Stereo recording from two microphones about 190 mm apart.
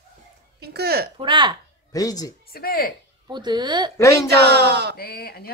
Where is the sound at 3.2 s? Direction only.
20° right (ahead or behind).